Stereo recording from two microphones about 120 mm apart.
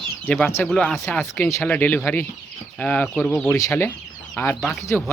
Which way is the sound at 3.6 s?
25° left (ahead or behind).